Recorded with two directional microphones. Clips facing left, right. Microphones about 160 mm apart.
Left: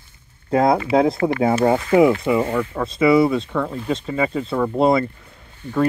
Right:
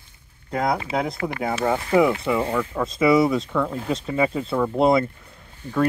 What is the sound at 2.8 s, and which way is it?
Speech, centre (ahead or behind).